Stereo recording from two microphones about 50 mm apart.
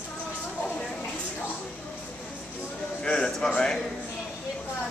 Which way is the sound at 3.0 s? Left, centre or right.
Centre.